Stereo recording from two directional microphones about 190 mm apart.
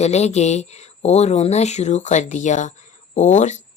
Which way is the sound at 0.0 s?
35° left (ahead or behind).